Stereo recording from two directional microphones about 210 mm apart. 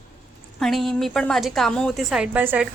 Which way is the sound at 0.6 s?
Centre (ahead or behind).